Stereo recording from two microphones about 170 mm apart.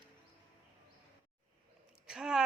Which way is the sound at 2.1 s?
5° right (ahead or behind).